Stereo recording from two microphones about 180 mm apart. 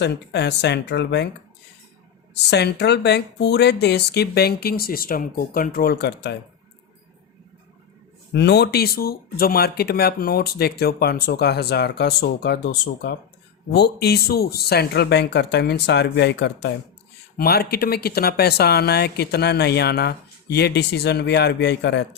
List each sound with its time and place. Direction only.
0.0 s speech: 70° left (ahead or behind)
2.3 s speech: 70° left (ahead or behind)
8.3 s speech: 70° left (ahead or behind)
17.3 s speech: 60° left (ahead or behind)